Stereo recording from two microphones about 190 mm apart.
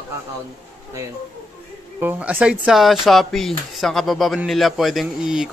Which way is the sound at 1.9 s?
10° right (ahead or behind).